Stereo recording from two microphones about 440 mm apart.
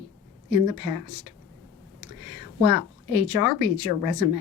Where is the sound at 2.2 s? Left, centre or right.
Left.